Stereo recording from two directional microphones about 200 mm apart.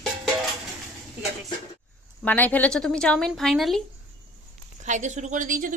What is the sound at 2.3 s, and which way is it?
A woman's voice, 10° left (ahead or behind).